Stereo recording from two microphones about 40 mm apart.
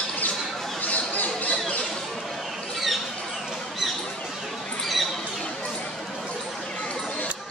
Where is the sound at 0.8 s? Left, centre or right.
Left.